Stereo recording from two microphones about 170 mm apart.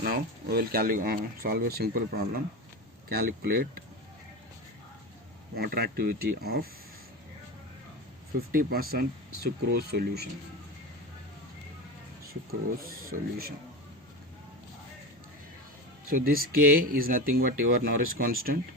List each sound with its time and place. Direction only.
0.0 s speech: 65° right (ahead or behind)
5.5 s speech: 65° right (ahead or behind)
8.4 s speech: 60° right (ahead or behind)
12.3 s speech: 60° right (ahead or behind)
16.0 s speech: 55° right (ahead or behind)